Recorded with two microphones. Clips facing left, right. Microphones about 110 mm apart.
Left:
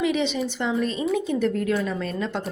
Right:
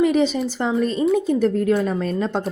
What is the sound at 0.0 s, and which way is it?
A woman's voice, 40° right (ahead or behind).